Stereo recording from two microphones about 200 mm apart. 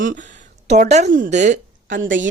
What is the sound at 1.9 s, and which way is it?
Speech, 70° right (ahead or behind).